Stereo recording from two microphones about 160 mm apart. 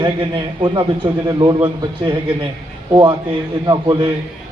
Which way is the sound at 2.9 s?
30° right (ahead or behind).